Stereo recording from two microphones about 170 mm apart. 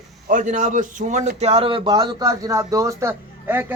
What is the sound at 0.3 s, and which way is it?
A man's voice, 50° right (ahead or behind).